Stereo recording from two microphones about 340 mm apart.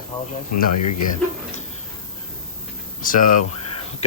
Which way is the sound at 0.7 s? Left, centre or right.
Left.